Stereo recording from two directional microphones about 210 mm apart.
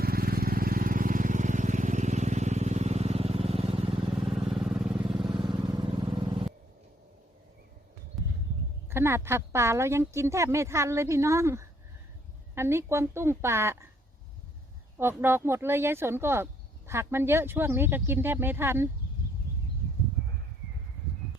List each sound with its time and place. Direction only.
0.0 s vehicle: 45° right (ahead or behind); by 3.9 s 25° right (ahead or behind)
4.3 s vehicle: centre (ahead or behind)
5.1 s vehicle: 20° right (ahead or behind)
8.2 s a sound: centre (ahead or behind)
8.9 s speech: 10° right (ahead or behind)
14.9 s speech: 10° right (ahead or behind)